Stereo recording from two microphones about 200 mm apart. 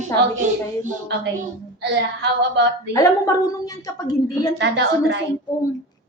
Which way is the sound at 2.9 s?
15° left (ahead or behind).